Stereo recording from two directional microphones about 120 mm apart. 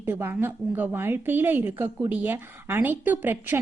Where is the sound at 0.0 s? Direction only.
15° right (ahead or behind).